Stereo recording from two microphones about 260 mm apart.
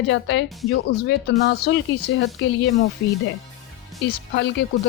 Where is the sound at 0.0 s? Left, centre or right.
Left.